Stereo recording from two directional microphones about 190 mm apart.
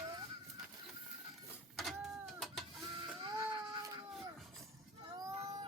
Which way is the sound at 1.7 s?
Centre (ahead or behind).